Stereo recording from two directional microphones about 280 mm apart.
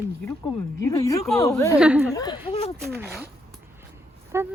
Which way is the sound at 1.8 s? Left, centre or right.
Centre.